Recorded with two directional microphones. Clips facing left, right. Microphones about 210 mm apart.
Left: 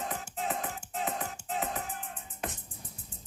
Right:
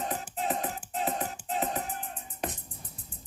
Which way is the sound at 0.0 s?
35° right (ahead or behind).